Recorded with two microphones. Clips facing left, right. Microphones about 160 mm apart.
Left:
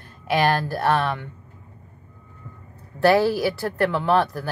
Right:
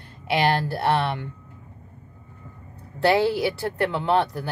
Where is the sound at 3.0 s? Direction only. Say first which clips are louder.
Left 2 dB; 20° right (ahead or behind).